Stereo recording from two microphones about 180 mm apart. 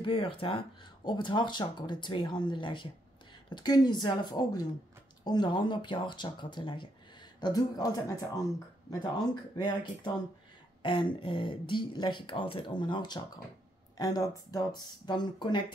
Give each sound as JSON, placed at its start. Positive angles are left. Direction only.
{"t": 0.0, "sound": "speech", "side_deg": 30}
{"t": 9.0, "sound": "speech", "side_deg": 25}
{"t": 10.8, "sound": "a sound", "side_deg": 30}
{"t": 11.1, "sound": "speech", "side_deg": 30}